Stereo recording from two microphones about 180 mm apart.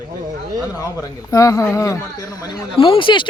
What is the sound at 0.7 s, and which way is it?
A man's voice, 20° left (ahead or behind).